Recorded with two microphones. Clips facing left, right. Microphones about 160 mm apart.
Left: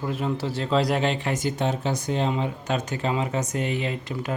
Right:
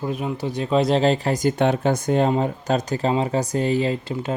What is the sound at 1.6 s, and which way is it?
Speech, 55° right (ahead or behind).